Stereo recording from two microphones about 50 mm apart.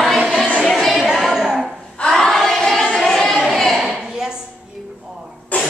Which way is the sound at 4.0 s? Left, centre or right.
Centre.